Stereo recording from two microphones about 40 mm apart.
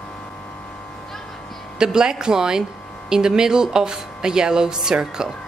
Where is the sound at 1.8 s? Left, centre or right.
Centre.